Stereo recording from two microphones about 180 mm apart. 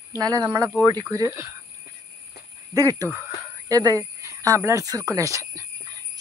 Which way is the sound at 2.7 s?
20° right (ahead or behind).